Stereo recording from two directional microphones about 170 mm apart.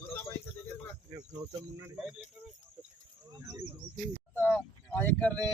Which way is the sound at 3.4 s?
20° right (ahead or behind).